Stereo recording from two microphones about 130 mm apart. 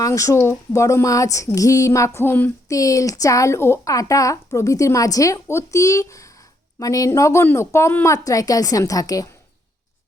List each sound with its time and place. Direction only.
0.0 s a woman's voice: 25° left (ahead or behind)
2.7 s a woman's voice: 25° left (ahead or behind)